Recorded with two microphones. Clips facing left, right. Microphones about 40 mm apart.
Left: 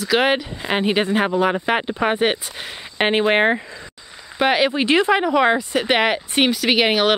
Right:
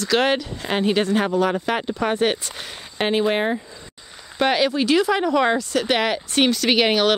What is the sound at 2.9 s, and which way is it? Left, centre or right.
Speech, left.